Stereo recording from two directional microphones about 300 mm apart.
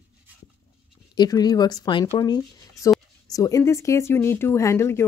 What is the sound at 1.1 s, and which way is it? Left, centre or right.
Speech, centre.